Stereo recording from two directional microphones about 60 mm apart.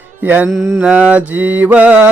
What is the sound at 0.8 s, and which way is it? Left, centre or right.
Mantra, right.